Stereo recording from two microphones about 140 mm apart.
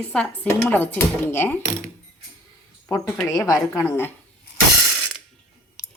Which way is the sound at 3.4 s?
20° left (ahead or behind).